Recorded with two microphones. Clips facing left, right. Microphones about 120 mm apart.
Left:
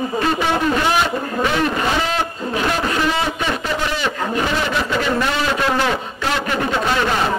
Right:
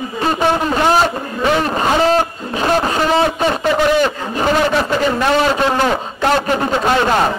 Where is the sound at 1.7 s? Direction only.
40° right (ahead or behind).